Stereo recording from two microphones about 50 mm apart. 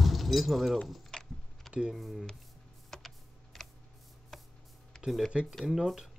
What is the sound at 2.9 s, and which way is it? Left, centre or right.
Typing, centre.